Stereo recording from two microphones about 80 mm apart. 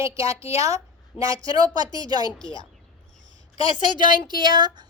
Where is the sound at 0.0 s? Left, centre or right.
Right.